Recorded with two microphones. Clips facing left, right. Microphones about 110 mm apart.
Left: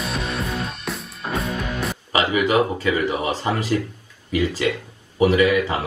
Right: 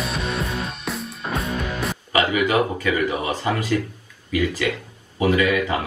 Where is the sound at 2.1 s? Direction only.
25° left (ahead or behind).